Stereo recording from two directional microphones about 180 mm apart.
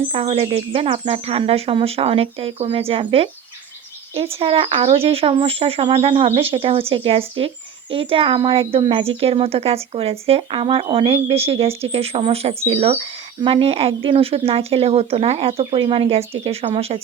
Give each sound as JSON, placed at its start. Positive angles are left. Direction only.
{"t": 0.1, "sound": "speech", "side_deg": -30}
{"t": 4.4, "sound": "speech", "side_deg": -30}